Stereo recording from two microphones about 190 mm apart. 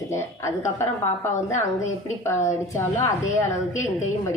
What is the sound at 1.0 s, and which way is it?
A woman's voice, 40° left (ahead or behind).